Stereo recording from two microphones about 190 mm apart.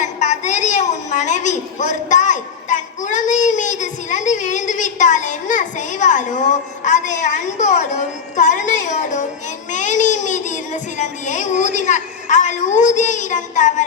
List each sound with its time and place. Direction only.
0.0 s a woman's voice: 40° left (ahead or behind)